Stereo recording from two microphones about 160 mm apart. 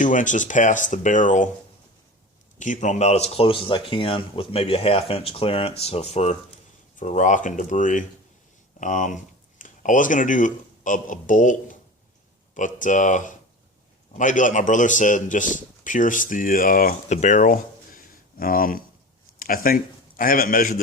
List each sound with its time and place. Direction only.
0.0 s speech: 55° left (ahead or behind)
2.6 s a man's voice: 50° left (ahead or behind)